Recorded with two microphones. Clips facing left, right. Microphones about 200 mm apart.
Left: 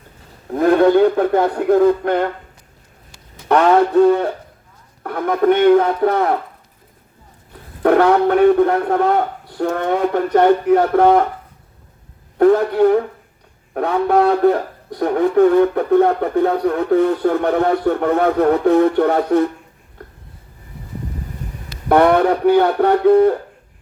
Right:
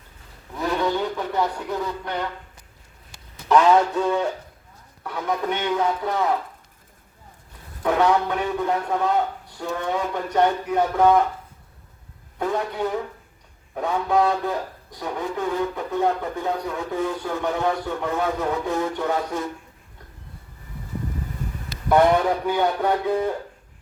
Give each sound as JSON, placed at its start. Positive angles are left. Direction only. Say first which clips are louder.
{"t": 0.5, "sound": "speech", "louder": "left 12 dB", "side_deg": 55}
{"t": 3.5, "sound": "speech", "louder": "left 5 dB", "side_deg": 60}
{"t": 7.8, "sound": "speech", "louder": "left 7 dB", "side_deg": 60}
{"t": 12.4, "sound": "speech", "louder": "left 13 dB", "side_deg": 60}
{"t": 21.8, "sound": "speech", "louder": "left 5 dB", "side_deg": 60}